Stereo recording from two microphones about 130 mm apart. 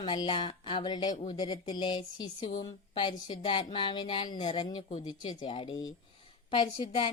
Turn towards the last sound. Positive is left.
turn(degrees=35)  # may be behind; listen again after turning